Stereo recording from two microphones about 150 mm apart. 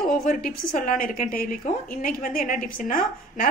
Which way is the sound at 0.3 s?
70° left (ahead or behind).